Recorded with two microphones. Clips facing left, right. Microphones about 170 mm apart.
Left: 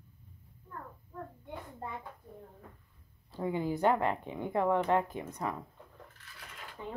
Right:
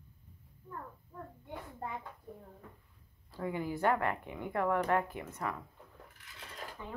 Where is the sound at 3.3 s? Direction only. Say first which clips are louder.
Left 4 dB; 20° left (ahead or behind).